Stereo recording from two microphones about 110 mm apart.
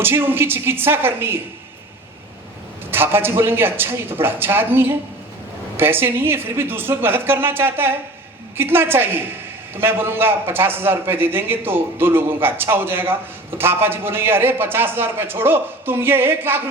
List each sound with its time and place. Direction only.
0.0 s a man's voice: 20° right (ahead or behind)
2.9 s a man's voice: 20° right (ahead or behind)